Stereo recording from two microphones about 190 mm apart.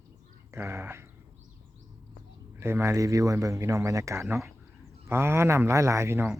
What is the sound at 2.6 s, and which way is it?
Speech, 15° right (ahead or behind).